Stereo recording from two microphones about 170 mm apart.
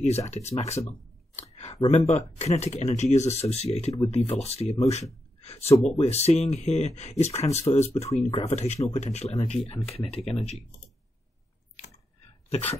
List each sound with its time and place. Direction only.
0.0 s speech: 40° left (ahead or behind)
1.3 s a sound: 40° left (ahead or behind)
1.9 s speech: 40° left (ahead or behind)
12.4 s speech: 35° left (ahead or behind)